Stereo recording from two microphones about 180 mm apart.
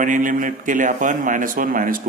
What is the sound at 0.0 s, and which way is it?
Speech, 45° right (ahead or behind).